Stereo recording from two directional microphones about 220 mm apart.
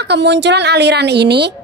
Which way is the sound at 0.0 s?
50° right (ahead or behind).